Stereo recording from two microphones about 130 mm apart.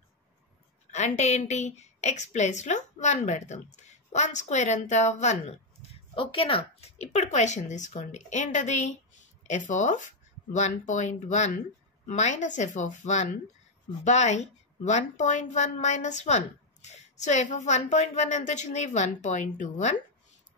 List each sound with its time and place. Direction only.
0.9 s a woman's voice: 60° left (ahead or behind)
6.1 s a woman's voice: 45° left (ahead or behind); by 20.0 s 70° left (ahead or behind)